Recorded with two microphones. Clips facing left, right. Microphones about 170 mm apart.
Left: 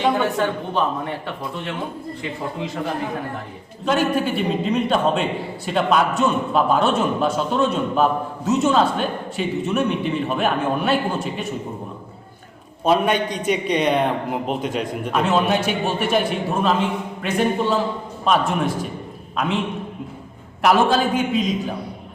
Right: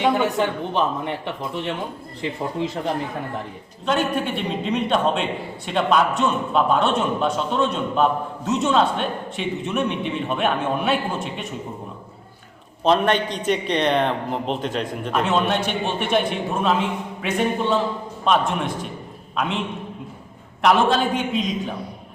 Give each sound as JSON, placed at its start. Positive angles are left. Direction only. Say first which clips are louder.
{"t": 0.0, "sound": "a man's voice", "louder": "even", "side_deg": -15}
{"t": 3.8, "sound": "a man's voice", "louder": "left 2 dB", "side_deg": 5}
{"t": 12.8, "sound": "a man's voice", "louder": "even", "side_deg": 10}
{"t": 20.6, "sound": "a man's voice", "louder": "left 1 dB", "side_deg": 5}